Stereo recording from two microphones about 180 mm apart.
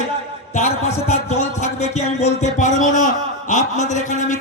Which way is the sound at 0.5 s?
40° left (ahead or behind).